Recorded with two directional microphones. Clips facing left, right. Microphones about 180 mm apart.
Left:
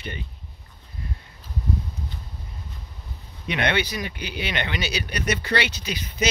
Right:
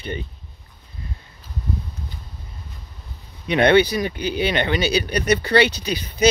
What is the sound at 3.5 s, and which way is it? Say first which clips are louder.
Speech: right 9 dB; 35° right (ahead or behind).